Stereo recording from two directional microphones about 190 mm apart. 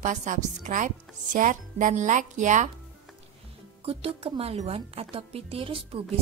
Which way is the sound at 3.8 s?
30° right (ahead or behind).